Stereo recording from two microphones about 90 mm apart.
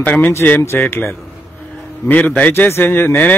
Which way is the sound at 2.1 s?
15° left (ahead or behind).